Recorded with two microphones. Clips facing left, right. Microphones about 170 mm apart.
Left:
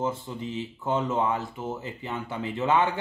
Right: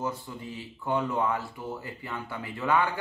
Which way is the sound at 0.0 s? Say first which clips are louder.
Left 4 dB; 25° left (ahead or behind).